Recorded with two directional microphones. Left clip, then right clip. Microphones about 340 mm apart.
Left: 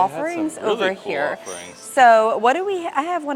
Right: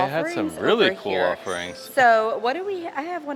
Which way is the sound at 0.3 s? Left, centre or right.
Right.